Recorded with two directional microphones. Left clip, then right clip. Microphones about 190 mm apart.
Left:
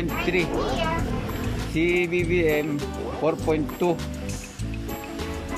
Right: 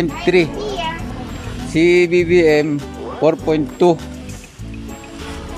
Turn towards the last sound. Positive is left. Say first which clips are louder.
# right 9 dB
turn(degrees=-20)  # may be behind; listen again after turning